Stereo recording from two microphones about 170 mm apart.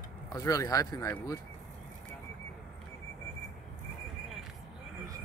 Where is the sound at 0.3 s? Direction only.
20° left (ahead or behind).